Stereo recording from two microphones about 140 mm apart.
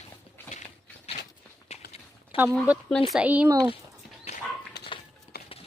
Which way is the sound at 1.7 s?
50° left (ahead or behind).